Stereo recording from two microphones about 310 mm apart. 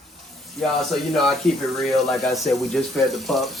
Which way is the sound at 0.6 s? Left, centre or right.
Centre.